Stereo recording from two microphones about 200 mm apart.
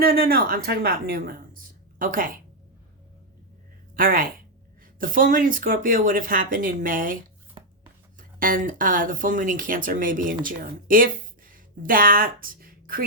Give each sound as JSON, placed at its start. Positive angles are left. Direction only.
{"t": 0.0, "sound": "speech", "side_deg": -50}
{"t": 3.9, "sound": "a woman's voice", "side_deg": -45}
{"t": 7.6, "sound": "chopping", "side_deg": -25}
{"t": 8.2, "sound": "speech", "side_deg": -45}